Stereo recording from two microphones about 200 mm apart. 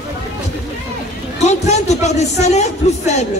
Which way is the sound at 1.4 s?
35° left (ahead or behind).